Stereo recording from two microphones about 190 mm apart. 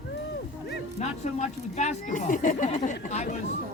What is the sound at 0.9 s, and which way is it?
Speech, 35° left (ahead or behind).